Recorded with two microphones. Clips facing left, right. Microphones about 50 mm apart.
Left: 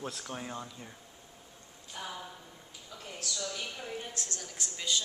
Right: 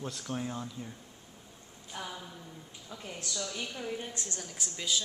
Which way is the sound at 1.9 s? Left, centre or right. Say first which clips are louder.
Right 1 dB; centre.